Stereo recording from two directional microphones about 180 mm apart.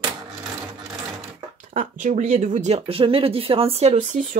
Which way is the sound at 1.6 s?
45° right (ahead or behind).